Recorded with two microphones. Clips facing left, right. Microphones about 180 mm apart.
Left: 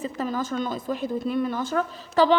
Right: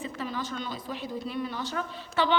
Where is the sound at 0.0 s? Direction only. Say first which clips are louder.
Left 6 dB; 45° left (ahead or behind).